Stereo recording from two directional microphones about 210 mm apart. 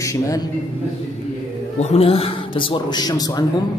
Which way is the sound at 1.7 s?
30° left (ahead or behind).